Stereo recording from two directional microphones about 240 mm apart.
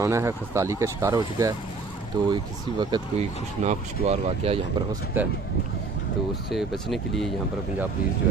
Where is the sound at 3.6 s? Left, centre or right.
Right.